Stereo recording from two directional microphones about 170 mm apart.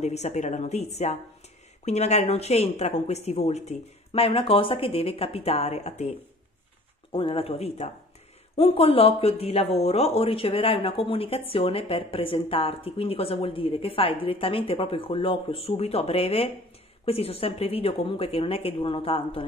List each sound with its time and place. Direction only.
0.0 s speech: 40° left (ahead or behind)
1.9 s speech: 40° left (ahead or behind)